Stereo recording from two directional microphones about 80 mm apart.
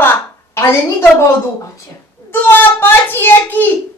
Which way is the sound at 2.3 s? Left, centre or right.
Left.